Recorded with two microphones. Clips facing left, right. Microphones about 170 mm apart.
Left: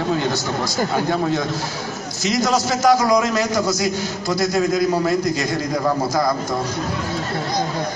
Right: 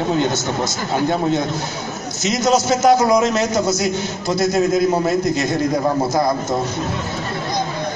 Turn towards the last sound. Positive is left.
turn(degrees=-25)  # may be behind; listen again after turning